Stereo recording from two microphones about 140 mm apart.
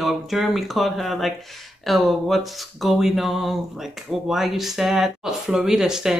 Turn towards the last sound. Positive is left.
turn(degrees=-5)  # may be behind; listen again after turning